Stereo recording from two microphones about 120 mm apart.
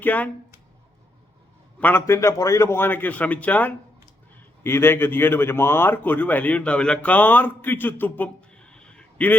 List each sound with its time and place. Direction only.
0.0 s a man's voice: 15° left (ahead or behind)
1.8 s a man's voice: 15° left (ahead or behind)